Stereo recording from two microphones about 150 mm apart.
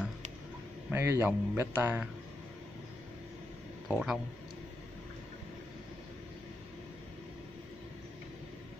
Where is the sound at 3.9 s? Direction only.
Centre (ahead or behind).